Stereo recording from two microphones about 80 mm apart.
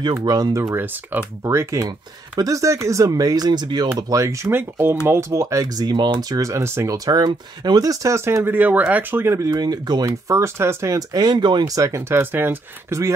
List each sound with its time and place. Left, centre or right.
0.0 s speech: right
1.8 s speech: right
4.1 s speech: right
4.5 s speech: right
6.2 s speech: right
7.1 s speech: right
8.5 s speech: centre
9.4 s speech: right
10.0 s speech: right
11.1 s speech: right
11.6 s speech: right